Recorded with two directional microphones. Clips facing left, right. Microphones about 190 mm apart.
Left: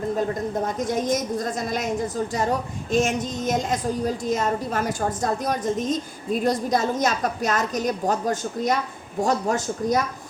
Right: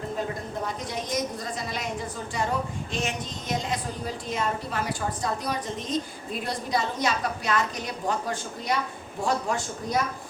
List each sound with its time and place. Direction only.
0.8 s a woman's voice: 45° left (ahead or behind)